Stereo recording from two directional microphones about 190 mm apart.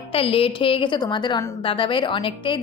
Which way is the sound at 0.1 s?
30° left (ahead or behind).